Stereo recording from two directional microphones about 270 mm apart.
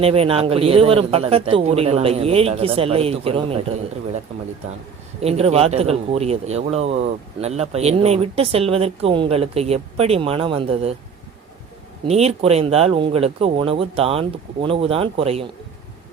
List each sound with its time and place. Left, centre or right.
0.0 s a man's voice: right
5.2 s a man's voice: right
12.0 s a man's voice: right